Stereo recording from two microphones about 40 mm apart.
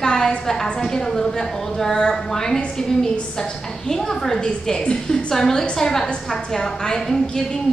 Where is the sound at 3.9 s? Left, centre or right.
Centre.